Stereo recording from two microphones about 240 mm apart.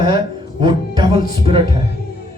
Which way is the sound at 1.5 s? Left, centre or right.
Right.